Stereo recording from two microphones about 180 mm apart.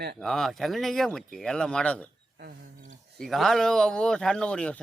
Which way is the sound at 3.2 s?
Centre (ahead or behind).